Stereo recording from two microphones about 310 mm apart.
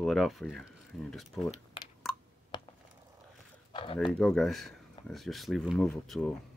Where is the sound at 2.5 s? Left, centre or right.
Centre.